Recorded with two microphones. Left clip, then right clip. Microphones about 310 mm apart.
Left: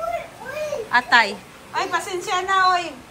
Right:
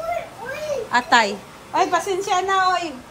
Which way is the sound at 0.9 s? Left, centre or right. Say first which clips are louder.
Left 1 dB; centre.